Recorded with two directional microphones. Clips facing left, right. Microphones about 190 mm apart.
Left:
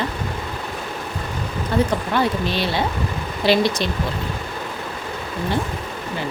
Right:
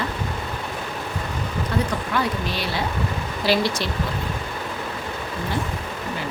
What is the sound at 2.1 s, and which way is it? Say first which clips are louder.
Speech: left 4 dB; 25° left (ahead or behind).